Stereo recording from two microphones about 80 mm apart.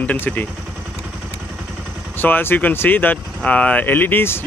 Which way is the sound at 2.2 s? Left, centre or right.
Left.